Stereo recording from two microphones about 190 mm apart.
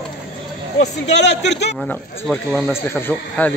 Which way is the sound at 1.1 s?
65° left (ahead or behind).